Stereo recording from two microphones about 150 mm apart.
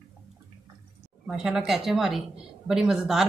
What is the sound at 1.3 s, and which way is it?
Speech, 5° right (ahead or behind).